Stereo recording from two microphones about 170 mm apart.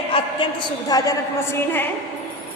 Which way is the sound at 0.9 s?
20° left (ahead or behind).